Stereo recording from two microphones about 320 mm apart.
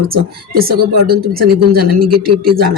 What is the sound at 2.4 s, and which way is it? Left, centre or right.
Speech, right.